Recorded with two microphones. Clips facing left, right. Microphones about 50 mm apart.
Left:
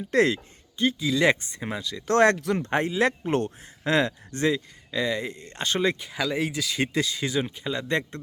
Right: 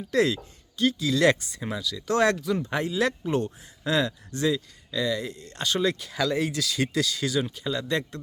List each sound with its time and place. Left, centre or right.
0.1 s speech: left
0.8 s speech: left
1.4 s speech: left
6.1 s speech: centre; by 8.2 s left